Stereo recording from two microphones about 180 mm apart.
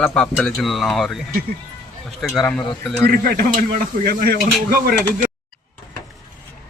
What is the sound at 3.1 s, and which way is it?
Speech, 55° right (ahead or behind).